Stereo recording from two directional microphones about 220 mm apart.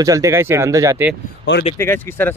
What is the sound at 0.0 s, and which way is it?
Speech, 15° right (ahead or behind).